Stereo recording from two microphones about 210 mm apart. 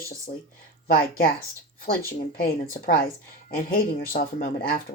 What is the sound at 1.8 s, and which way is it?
Speech, 45° left (ahead or behind).